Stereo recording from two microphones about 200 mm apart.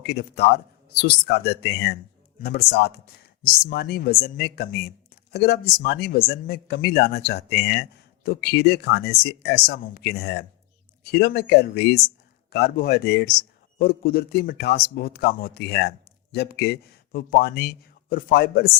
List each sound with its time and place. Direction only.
0.0 s speech: 55° left (ahead or behind)